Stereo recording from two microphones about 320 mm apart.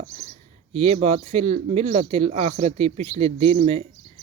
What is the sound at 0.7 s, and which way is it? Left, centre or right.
Speech, centre.